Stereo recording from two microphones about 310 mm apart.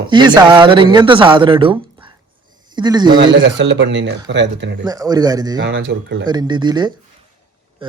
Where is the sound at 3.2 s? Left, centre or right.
Right.